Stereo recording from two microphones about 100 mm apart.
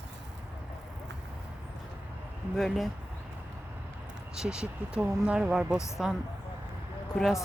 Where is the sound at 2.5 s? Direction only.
Centre (ahead or behind).